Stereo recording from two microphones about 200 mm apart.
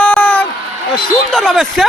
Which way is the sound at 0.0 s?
5° left (ahead or behind).